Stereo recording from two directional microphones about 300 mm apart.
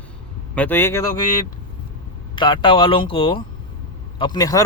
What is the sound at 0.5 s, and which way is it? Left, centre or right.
Speech, centre.